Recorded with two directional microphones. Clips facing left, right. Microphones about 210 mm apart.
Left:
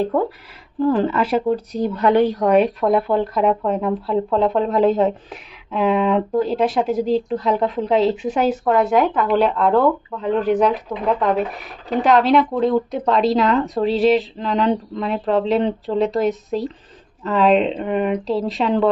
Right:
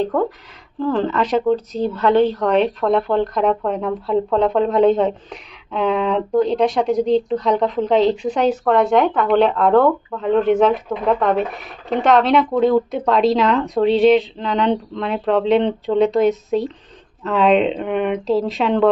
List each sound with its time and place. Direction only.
0.0 s speech: 10° left (ahead or behind)